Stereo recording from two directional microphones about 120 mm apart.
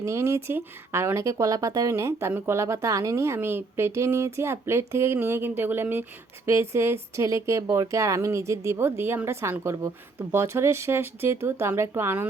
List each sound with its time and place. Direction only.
0.0 s speech: 25° right (ahead or behind)